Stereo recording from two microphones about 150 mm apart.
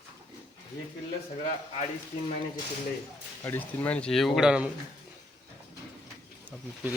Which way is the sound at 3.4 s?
15° left (ahead or behind).